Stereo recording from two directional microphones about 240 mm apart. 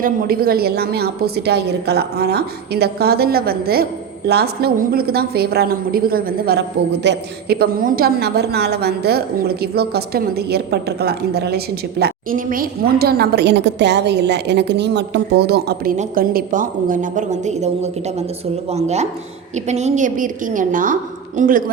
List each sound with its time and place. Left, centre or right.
0.0 s a man's voice: right